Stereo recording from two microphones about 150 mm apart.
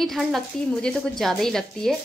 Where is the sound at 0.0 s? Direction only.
Centre (ahead or behind).